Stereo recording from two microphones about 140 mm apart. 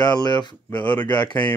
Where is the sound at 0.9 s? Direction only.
30° left (ahead or behind).